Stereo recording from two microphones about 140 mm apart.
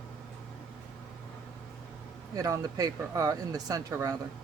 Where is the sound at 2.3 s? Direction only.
25° right (ahead or behind).